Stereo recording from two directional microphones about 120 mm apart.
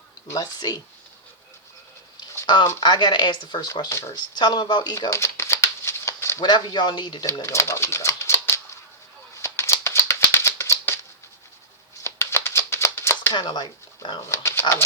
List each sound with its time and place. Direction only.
0.3 s speech: 30° left (ahead or behind)
2.8 s speech: 40° left (ahead or behind)
3.7 s speech: 25° left (ahead or behind)
4.1 s crumpling: 35° left (ahead or behind); by 6.4 s 20° left (ahead or behind)
6.4 s speech: 40° left (ahead or behind); by 8.8 s 25° left (ahead or behind)
9.4 s rattle: 20° left (ahead or behind)
12.0 s a sound: 20° left (ahead or behind)
13.3 s speech: 40° left (ahead or behind)
14.3 s speech: 20° left (ahead or behind)